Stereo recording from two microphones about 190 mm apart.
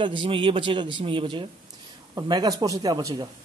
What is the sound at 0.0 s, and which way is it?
A man's voice, 25° right (ahead or behind).